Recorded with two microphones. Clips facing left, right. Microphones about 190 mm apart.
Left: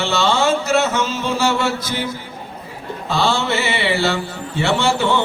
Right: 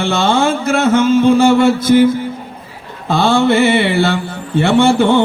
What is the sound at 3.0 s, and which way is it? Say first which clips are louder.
Mantra: right 7 dB; 55° right (ahead or behind).